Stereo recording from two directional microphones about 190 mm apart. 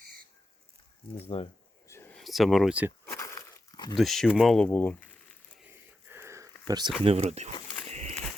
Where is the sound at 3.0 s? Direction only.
15° left (ahead or behind).